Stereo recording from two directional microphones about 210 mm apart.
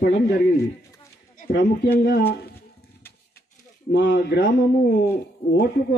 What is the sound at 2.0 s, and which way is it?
Speech, 45° left (ahead or behind).